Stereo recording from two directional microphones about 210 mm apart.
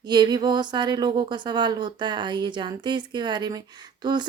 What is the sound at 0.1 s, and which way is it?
Speech, 20° right (ahead or behind).